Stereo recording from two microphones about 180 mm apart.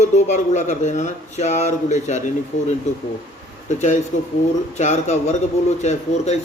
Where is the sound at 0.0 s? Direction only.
40° left (ahead or behind).